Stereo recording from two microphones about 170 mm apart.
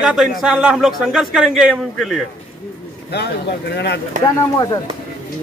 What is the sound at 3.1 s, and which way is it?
Speech, 80° left.